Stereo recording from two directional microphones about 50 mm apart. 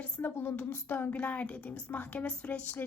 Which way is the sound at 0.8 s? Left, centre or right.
Left.